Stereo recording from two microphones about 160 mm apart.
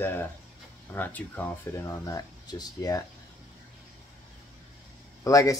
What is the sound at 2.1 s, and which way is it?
Speech, 25° left (ahead or behind).